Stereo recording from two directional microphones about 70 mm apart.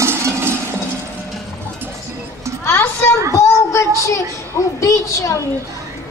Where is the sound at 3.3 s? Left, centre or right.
Left.